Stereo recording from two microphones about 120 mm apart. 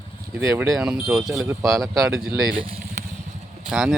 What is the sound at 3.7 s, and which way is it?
Speech, 5° right (ahead or behind).